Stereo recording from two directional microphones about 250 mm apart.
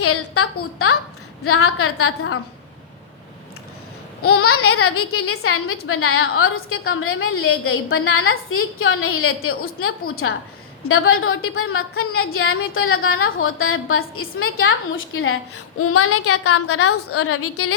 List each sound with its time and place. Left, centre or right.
0.0 s a woman's voice: left
4.2 s a woman's voice: left